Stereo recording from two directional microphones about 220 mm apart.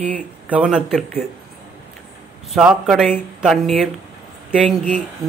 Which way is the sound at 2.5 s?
Centre (ahead or behind).